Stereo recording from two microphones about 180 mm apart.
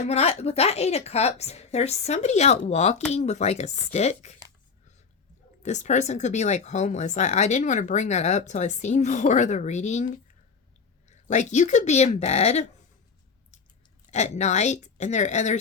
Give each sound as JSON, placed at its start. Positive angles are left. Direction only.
{"t": 0.0, "sound": "speech", "side_deg": 35}
{"t": 5.6, "sound": "speech", "side_deg": 40}
{"t": 14.1, "sound": "speech", "side_deg": 40}